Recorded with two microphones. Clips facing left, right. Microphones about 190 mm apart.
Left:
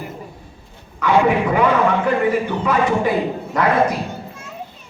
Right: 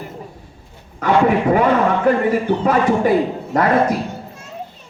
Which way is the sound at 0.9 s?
50° right (ahead or behind).